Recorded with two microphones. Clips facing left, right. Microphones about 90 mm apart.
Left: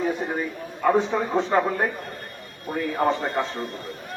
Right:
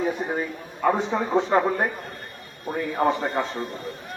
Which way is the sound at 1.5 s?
5° right (ahead or behind).